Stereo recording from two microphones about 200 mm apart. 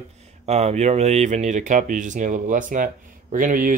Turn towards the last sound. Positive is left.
turn(degrees=-45)  # may be behind; listen again after turning